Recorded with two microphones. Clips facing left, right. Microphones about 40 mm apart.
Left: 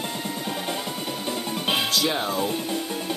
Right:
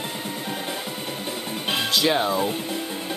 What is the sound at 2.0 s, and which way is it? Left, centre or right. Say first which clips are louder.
Speech: right 4 dB; right.